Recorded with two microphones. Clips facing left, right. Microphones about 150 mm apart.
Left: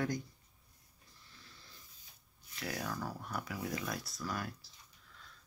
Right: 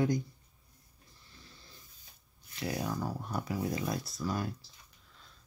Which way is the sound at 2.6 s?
20° right (ahead or behind).